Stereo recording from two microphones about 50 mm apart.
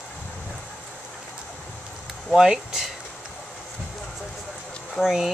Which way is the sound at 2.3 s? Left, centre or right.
Centre.